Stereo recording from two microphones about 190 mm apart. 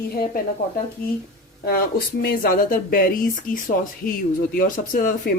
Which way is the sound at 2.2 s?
50° left (ahead or behind).